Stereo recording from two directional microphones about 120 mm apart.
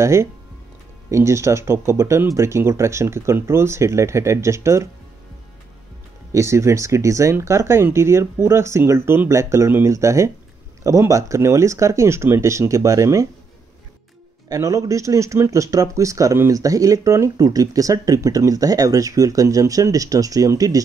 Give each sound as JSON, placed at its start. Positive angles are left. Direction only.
{"t": 0.0, "sound": "speech", "side_deg": -25}
{"t": 6.3, "sound": "speech", "side_deg": -25}
{"t": 14.5, "sound": "speech", "side_deg": -25}